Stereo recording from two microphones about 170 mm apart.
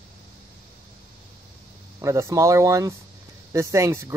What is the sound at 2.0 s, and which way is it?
Speech, 15° right (ahead or behind).